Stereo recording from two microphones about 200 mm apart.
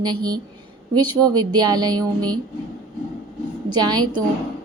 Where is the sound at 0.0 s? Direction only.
20° right (ahead or behind).